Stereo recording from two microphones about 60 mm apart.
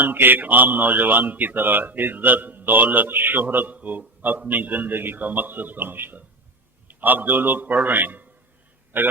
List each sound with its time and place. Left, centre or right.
0.0 s a man's voice: right